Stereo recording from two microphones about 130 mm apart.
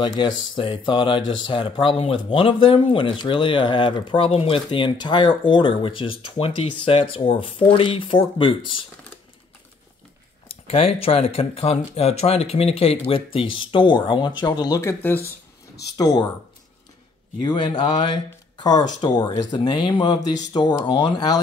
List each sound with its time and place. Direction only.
0.0 s speech: 35° left (ahead or behind)
10.5 s speech: 50° left (ahead or behind); by 15.0 s 25° left (ahead or behind)
16.0 s speech: 30° left (ahead or behind)
17.4 s speech: 35° left (ahead or behind)